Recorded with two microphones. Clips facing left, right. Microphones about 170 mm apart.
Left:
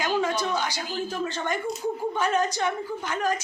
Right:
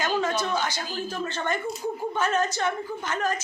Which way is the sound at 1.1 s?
10° left (ahead or behind).